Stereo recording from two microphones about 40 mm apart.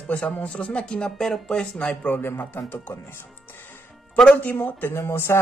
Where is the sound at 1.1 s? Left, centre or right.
Centre.